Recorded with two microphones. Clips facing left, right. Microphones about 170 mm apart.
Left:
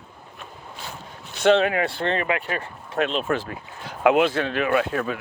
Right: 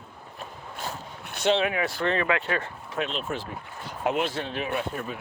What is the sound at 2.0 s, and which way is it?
Speech, 45° left (ahead or behind).